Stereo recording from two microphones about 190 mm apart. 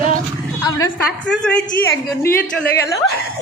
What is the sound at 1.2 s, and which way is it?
A woman's voice, 5° left (ahead or behind).